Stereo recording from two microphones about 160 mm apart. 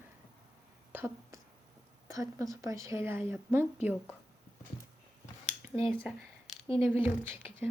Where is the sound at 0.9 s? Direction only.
15° right (ahead or behind).